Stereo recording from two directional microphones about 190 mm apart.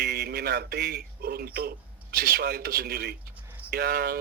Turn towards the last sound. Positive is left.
turn(degrees=-55)  # may be behind; listen again after turning